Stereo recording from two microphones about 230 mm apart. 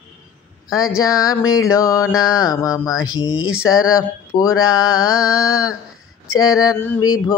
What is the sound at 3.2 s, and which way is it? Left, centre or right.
Speech, left.